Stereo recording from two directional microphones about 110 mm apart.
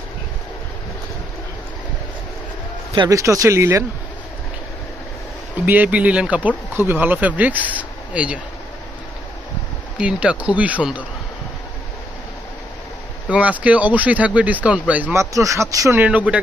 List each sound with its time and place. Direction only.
3.1 s speech: 30° right (ahead or behind)
5.7 s speech: 15° right (ahead or behind)
9.9 s speech: 10° right (ahead or behind)
13.3 s speech: 10° right (ahead or behind)
15.1 s speech: 30° right (ahead or behind)
16.0 s speech: 15° right (ahead or behind)